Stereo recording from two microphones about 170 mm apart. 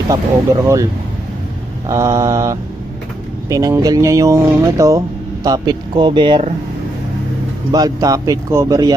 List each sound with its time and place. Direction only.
0.1 s speech: 20° right (ahead or behind)
1.9 s mantra: 20° right (ahead or behind)
3.4 s speech: 20° right (ahead or behind)
7.7 s speech: 20° right (ahead or behind)